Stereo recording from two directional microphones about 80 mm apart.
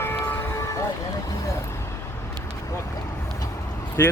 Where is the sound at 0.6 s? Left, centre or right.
Left.